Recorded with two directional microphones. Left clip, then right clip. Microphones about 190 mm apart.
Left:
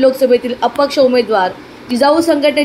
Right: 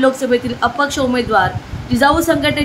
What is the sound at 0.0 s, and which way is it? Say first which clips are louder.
A woman's voice: left 4 dB; 5° left (ahead or behind).